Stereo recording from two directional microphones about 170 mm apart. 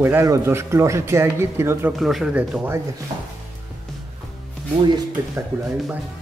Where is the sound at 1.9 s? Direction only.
Centre (ahead or behind).